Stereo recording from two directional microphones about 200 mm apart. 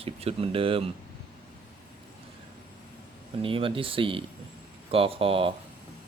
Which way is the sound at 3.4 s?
25° right (ahead or behind).